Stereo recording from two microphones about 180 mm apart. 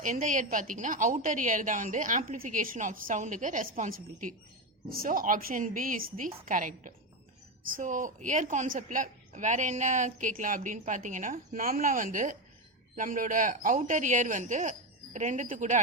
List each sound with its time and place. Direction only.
0.0 s a woman's voice: 45° right (ahead or behind)